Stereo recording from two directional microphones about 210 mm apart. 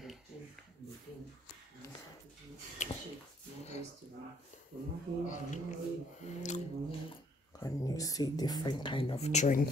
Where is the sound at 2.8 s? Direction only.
35° left (ahead or behind).